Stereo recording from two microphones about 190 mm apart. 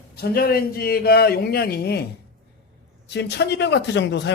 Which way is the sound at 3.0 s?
60° left (ahead or behind).